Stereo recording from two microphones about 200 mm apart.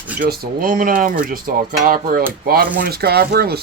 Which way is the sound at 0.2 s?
45° right (ahead or behind).